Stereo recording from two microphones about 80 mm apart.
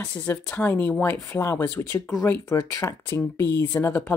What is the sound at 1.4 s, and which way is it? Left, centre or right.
Speech, left.